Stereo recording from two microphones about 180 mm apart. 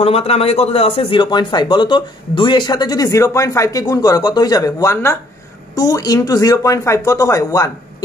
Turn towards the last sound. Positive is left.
turn(degrees=20)  # may be behind; listen again after turning